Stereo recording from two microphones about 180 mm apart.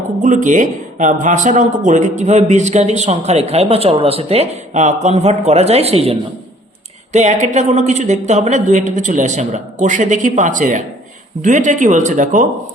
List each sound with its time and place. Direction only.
0.2 s speech: 45° right (ahead or behind)